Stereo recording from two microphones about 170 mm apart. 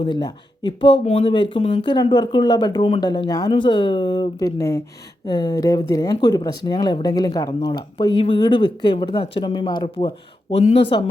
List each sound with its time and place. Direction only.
0.0 s speech: 25° left (ahead or behind)
10.6 s speech: 35° left (ahead or behind)